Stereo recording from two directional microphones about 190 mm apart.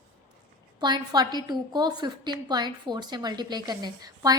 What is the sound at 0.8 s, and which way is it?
A woman's voice, 20° right (ahead or behind).